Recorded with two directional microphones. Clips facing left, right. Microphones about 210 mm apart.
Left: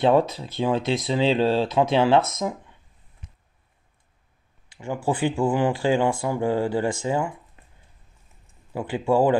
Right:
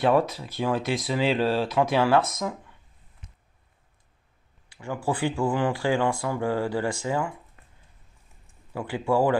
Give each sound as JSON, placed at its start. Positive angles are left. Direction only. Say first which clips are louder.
{"t": 0.0, "sound": "speech", "louder": "left 3 dB", "side_deg": 25}
{"t": 4.7, "sound": "speech", "louder": "left 3 dB", "side_deg": 20}
{"t": 8.7, "sound": "speech", "louder": "left 3 dB", "side_deg": 20}